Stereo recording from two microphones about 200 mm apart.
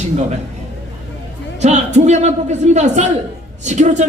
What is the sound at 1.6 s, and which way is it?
Speech, 35° right (ahead or behind).